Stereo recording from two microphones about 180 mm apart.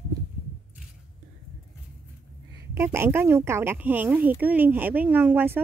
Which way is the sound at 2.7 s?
15° right (ahead or behind).